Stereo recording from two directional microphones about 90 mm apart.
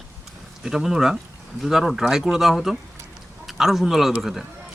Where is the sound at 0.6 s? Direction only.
5° right (ahead or behind).